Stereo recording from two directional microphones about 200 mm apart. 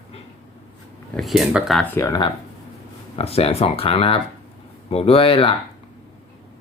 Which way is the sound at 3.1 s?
30° left (ahead or behind).